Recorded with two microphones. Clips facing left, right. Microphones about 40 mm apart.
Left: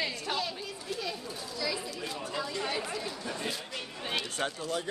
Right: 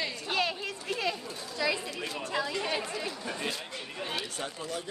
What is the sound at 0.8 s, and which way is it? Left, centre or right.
Speech, right.